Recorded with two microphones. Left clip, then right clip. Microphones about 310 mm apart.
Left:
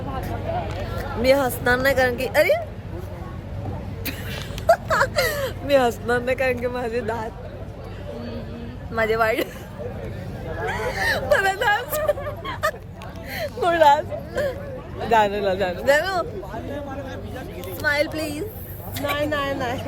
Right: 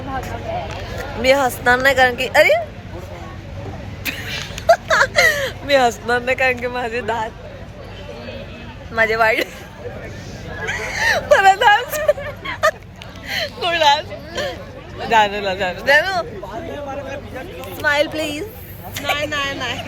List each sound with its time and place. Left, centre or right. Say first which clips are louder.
1.2 s speech: right 4 dB; centre
4.0 s a sound: right 8 dB; centre
9.0 s speech: right 5 dB; centre
10.7 s a sound: right 2 dB; centre
11.0 s speech: right 8 dB; centre
13.2 s speech: right 2 dB; centre
17.7 s speech: right 5 dB; centre
19.1 s speech: right 2 dB; centre